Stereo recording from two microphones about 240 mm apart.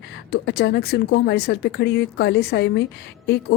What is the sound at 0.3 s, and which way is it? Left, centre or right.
Speech, left.